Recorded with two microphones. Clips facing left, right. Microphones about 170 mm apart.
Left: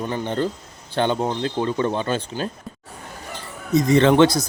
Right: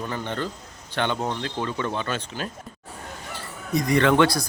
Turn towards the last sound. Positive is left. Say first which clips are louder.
# left 4 dB
turn(degrees=20)  # may be behind; listen again after turning